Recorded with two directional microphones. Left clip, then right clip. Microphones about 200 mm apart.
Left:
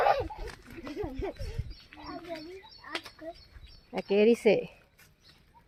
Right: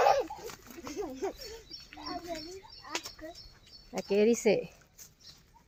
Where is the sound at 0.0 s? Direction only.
45° left (ahead or behind).